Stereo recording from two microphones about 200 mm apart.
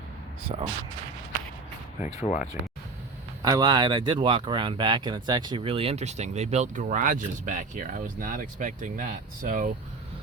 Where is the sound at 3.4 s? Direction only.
20° right (ahead or behind); by 9.7 s 40° right (ahead or behind).